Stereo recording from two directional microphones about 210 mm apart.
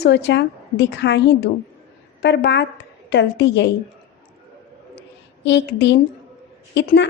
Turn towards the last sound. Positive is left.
turn(degrees=55)  # may be behind; listen again after turning